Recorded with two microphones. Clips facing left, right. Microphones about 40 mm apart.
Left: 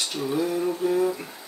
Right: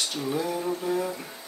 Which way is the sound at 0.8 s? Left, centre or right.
Centre.